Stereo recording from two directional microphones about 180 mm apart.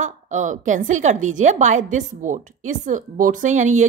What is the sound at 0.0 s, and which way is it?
A woman's voice, 45° right (ahead or behind).